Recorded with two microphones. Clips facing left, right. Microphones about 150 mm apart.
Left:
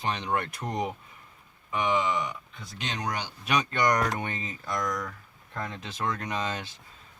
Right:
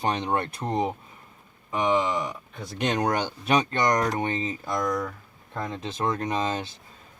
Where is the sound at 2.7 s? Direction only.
55° right (ahead or behind).